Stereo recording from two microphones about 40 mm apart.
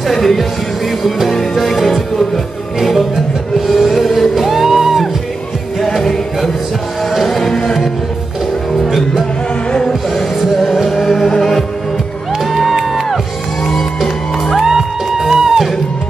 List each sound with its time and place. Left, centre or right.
0.1 s speech: centre
1.3 s music: centre
5.8 s music: centre
9.7 s music: centre
10.1 s music: centre
12.5 s music: centre
13.7 s music: centre
14.6 s music: centre